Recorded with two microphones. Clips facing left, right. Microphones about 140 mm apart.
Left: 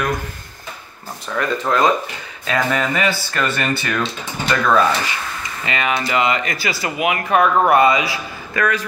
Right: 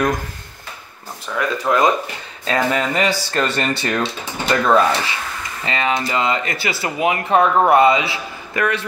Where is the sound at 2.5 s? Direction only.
25° right (ahead or behind).